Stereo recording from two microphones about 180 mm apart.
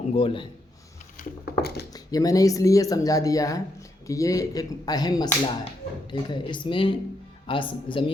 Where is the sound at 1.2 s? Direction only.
60° left (ahead or behind).